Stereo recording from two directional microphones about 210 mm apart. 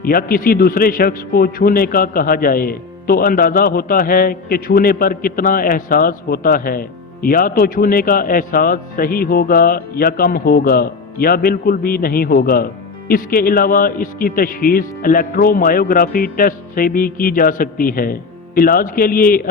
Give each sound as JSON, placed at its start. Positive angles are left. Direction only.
{"t": 0.0, "sound": "a man's voice", "side_deg": 45}